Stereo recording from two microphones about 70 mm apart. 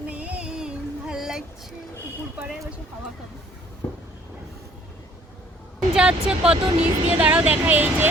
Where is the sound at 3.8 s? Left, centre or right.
Left.